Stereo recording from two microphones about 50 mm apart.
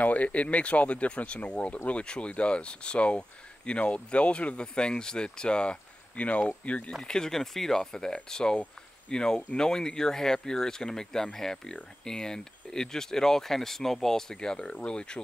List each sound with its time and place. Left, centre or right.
0.0 s speech: left
6.9 s speech: centre